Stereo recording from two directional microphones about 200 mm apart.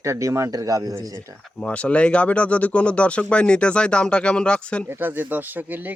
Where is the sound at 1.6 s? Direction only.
5° left (ahead or behind).